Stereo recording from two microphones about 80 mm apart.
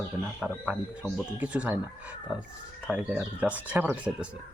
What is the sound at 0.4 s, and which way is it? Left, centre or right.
Speech, centre.